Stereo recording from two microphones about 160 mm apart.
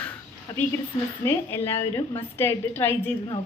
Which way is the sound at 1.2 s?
15° left (ahead or behind).